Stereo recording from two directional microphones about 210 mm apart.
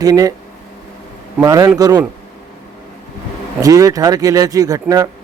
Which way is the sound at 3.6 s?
15° right (ahead or behind).